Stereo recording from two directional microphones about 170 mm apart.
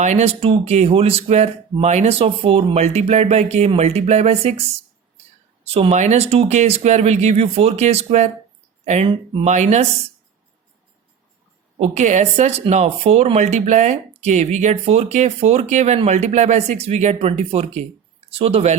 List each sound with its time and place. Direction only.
0.0 s speech: 40° right (ahead or behind)
5.7 s speech: 40° right (ahead or behind)
11.8 s speech: 45° right (ahead or behind)